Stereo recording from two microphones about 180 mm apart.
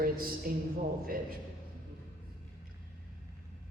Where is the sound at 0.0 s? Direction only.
55° right (ahead or behind).